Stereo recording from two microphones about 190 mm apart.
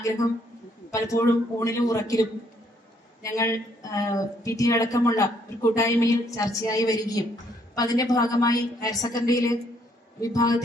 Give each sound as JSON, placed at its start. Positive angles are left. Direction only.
{"t": 0.9, "sound": "a woman's voice", "side_deg": 15}
{"t": 3.2, "sound": "a woman's voice", "side_deg": 15}